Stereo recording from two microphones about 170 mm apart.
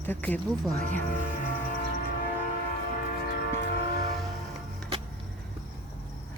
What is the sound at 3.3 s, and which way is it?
Train, 65° left (ahead or behind).